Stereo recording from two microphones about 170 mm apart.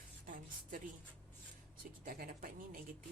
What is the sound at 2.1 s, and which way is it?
Speech, 60° right (ahead or behind).